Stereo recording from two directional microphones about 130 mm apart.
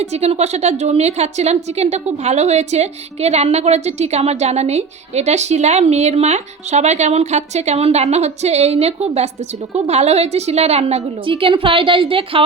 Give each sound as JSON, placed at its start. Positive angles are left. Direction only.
{"t": 0.0, "sound": "a woman's voice", "side_deg": -55}